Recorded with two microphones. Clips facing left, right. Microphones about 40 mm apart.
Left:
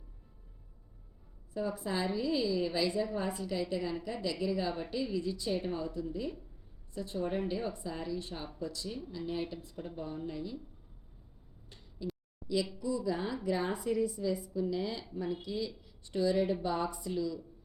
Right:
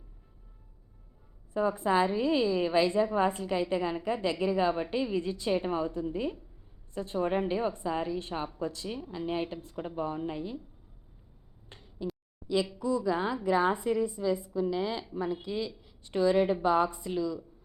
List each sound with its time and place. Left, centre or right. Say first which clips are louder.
1.5 s a woman's voice: right 8 dB; right
11.7 s a sound: right 6 dB; right
12.8 s a woman's voice: right 5 dB; right
13.1 s a woman's voice: right 6 dB; right
13.7 s a woman's voice: right 3 dB; right
14.5 s speech: right 4 dB; right
15.3 s a woman's voice: right 3 dB; right